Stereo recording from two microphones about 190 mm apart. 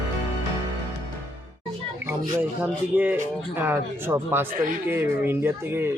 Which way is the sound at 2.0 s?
10° right (ahead or behind).